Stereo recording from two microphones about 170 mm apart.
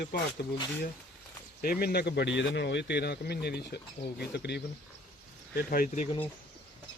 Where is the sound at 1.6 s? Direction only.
60° left (ahead or behind); by 4.6 s 80° left.